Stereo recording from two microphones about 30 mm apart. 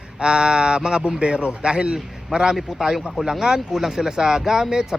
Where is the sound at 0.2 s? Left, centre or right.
Right.